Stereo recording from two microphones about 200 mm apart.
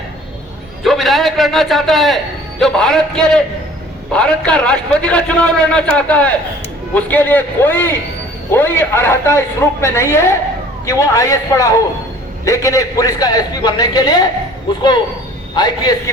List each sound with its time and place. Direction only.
0.8 s a man's voice: centre (ahead or behind); by 14.2 s 20° left (ahead or behind)
15.5 s a man's voice: 20° left (ahead or behind)